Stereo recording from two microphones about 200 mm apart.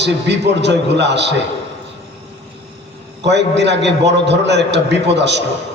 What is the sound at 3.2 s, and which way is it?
A man's voice, 60° right (ahead or behind).